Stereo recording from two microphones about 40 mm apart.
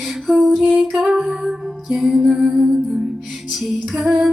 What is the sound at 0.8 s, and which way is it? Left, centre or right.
Music, centre.